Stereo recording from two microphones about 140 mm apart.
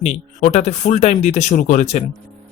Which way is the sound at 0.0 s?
60° left (ahead or behind).